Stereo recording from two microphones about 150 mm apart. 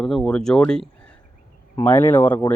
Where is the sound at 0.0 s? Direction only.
5° left (ahead or behind).